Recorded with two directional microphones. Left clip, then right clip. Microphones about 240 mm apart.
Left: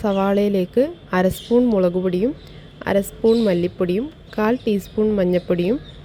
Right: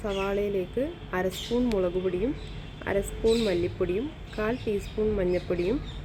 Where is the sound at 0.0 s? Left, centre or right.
Left.